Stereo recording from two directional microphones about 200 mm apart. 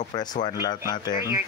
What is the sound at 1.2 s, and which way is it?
Speech, 15° right (ahead or behind).